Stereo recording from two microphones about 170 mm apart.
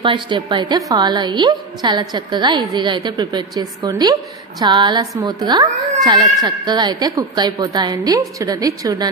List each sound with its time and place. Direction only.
0.0 s a woman's voice: 30° right (ahead or behind)